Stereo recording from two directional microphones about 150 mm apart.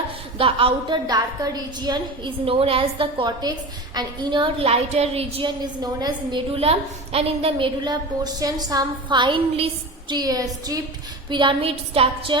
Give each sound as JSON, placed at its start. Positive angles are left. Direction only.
{"t": 0.3, "sound": "a woman's voice", "side_deg": -35}